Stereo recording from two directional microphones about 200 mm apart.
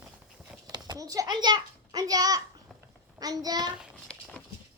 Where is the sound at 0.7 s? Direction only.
20° right (ahead or behind).